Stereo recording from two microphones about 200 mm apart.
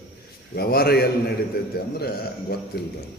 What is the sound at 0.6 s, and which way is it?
A man's voice, 50° left (ahead or behind).